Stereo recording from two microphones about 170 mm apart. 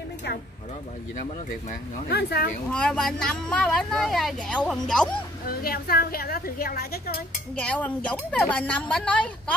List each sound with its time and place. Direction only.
2.0 s speech: 70° left (ahead or behind)
2.7 s speech: 5° left (ahead or behind)
5.5 s a woman's voice: 60° left (ahead or behind)
7.5 s a woman's voice: 5° left (ahead or behind)